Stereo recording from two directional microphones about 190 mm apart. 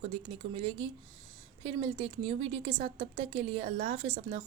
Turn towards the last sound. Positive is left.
turn(degrees=-30)  # may be behind; listen again after turning